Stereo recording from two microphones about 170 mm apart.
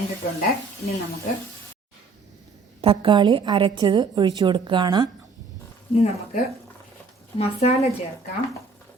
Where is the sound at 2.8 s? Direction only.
30° right (ahead or behind).